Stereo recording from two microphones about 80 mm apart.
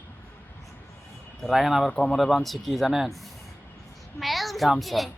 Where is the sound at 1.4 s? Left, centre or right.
Centre.